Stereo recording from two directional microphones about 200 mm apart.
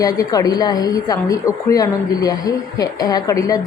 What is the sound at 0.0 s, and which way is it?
A woman's voice, 20° left (ahead or behind).